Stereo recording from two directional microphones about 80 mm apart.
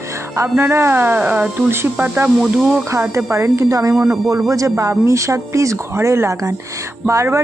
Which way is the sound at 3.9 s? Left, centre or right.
Centre.